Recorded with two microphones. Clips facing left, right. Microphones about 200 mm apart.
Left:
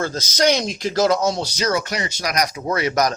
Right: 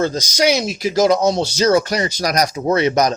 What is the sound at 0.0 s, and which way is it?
Speech, 15° right (ahead or behind).